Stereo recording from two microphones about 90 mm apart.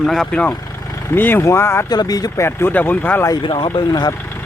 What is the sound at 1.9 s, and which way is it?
Speech, 45° left (ahead or behind).